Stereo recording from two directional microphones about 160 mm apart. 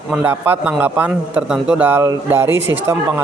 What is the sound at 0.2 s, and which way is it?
A man's voice, 10° right (ahead or behind).